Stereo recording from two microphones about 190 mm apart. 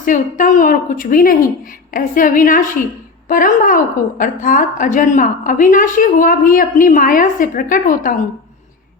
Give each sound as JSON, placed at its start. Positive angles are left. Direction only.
{"t": 0.0, "sound": "a woman's voice", "side_deg": 45}